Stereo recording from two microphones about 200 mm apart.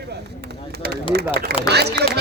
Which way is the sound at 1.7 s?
55° right (ahead or behind).